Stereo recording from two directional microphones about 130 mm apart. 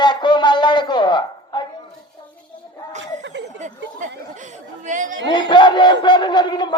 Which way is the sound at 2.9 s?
65° right (ahead or behind).